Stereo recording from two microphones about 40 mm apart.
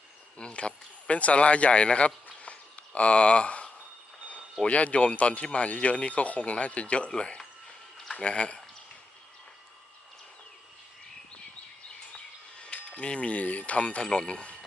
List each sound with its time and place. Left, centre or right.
0.3 s speech: left
12.7 s speech: left